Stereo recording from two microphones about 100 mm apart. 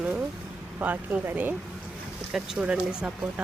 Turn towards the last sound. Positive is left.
turn(degrees=-10)  # may be behind; listen again after turning